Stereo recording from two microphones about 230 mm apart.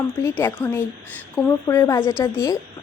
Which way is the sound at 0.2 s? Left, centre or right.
Centre.